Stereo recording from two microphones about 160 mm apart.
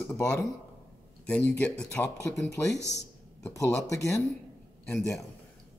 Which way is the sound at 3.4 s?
20° left (ahead or behind).